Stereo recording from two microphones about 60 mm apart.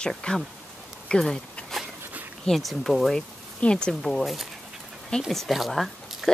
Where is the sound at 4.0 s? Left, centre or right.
Centre.